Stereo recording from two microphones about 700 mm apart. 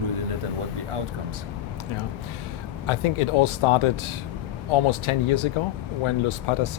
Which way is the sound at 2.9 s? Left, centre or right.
Left.